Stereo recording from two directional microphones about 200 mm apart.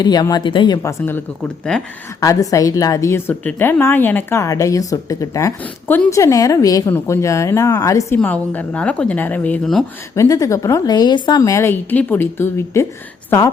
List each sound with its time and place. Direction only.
0.0 s speech: 20° left (ahead or behind)
2.2 s a woman's voice: 15° left (ahead or behind)
10.2 s a woman's voice: 15° left (ahead or behind)